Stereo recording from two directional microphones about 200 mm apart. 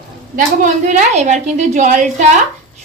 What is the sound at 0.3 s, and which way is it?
A woman's voice, 40° right (ahead or behind).